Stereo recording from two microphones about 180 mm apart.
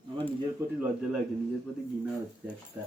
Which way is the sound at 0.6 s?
15° right (ahead or behind).